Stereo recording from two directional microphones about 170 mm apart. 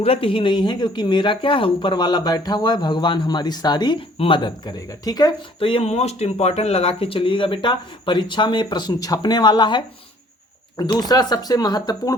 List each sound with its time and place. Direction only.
0.0 s speech: 35° left (ahead or behind)